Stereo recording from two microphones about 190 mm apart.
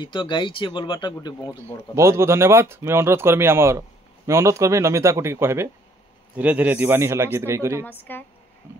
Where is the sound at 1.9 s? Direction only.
15° right (ahead or behind).